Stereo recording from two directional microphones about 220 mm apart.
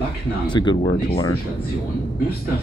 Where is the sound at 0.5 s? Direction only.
20° left (ahead or behind).